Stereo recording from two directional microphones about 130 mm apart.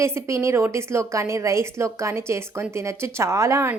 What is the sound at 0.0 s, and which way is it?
A woman's voice, 20° right (ahead or behind).